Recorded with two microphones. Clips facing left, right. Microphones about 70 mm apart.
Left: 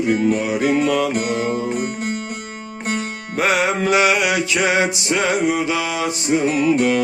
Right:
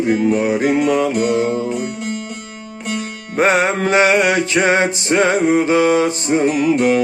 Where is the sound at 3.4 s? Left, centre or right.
Right.